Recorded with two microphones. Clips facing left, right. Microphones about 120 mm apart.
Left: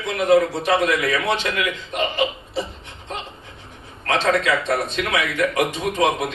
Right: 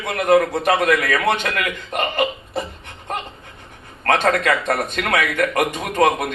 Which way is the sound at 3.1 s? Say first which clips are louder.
Right 4 dB; 55° right (ahead or behind).